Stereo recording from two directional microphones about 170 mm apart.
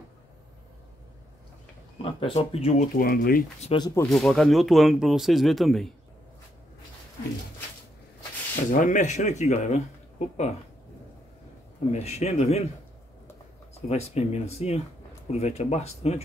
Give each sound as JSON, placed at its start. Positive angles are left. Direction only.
{"t": 2.0, "sound": "speech", "side_deg": 30}
{"t": 3.0, "sound": "speech", "side_deg": 60}
{"t": 3.6, "sound": "speech", "side_deg": 25}
{"t": 4.1, "sound": "speech", "side_deg": 0}
{"t": 8.7, "sound": "speech", "side_deg": 45}
{"t": 11.9, "sound": "speech", "side_deg": 40}
{"t": 13.7, "sound": "speech", "side_deg": 40}